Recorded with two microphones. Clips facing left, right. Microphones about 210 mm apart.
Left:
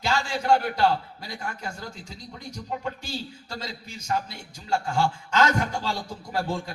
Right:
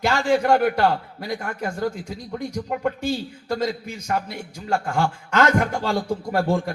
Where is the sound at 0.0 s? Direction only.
55° right (ahead or behind).